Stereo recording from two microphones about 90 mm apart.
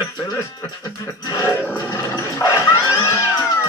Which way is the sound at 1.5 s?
20° left (ahead or behind).